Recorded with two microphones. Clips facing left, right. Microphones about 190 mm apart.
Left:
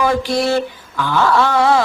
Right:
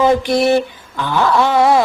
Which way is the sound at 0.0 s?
20° right (ahead or behind).